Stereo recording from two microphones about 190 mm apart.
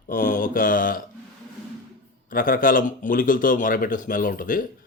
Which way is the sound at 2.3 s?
50° left (ahead or behind).